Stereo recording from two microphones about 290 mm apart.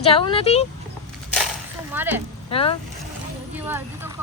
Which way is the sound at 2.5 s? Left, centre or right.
Centre.